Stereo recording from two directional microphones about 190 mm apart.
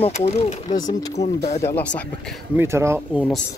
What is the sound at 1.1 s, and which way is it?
Speech, 35° left (ahead or behind).